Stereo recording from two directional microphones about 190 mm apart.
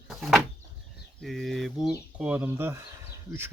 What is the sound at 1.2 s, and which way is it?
Speech, centre (ahead or behind).